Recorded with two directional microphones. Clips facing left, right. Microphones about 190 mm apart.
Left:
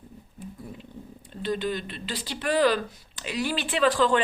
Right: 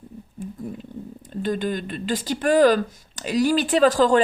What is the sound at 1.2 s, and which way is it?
A woman's voice, 45° right (ahead or behind).